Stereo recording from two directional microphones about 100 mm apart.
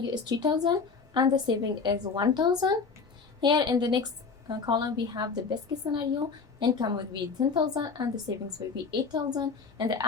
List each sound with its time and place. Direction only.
0.0 s a woman's voice: 45° right (ahead or behind)